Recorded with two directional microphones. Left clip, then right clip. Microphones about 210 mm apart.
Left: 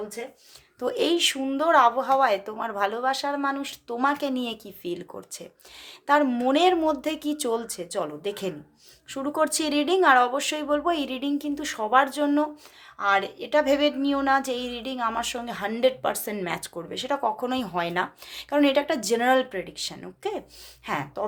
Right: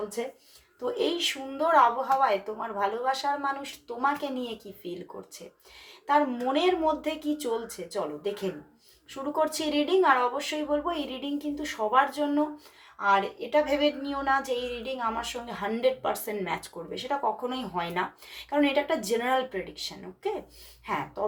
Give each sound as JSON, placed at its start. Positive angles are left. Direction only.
{"t": 0.9, "sound": "a woman's voice", "side_deg": 50}